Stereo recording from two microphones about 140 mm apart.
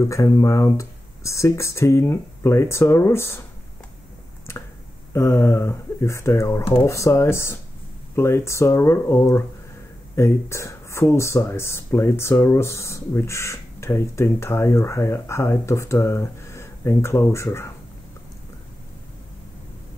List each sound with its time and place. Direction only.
0.0 s speech: 20° left (ahead or behind)
5.1 s speech: 20° left (ahead or behind)